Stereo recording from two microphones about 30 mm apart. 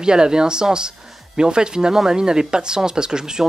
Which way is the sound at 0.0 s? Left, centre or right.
Right.